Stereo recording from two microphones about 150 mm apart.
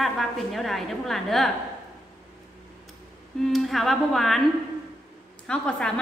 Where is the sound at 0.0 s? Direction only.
Centre (ahead or behind).